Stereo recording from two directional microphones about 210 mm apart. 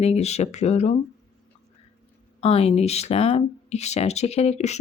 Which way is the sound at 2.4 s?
30° left (ahead or behind).